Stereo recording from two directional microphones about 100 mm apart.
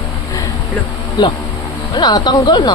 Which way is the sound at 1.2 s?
45° left (ahead or behind).